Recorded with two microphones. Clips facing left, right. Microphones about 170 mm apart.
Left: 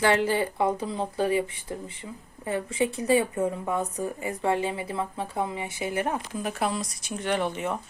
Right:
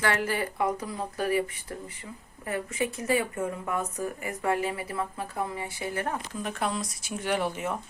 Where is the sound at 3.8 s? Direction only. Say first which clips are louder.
Left 2 dB; 35° left (ahead or behind); by 6.4 s 20° left (ahead or behind).